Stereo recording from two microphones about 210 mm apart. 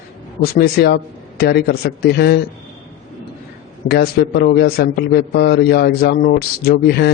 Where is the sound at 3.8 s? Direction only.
50° left (ahead or behind).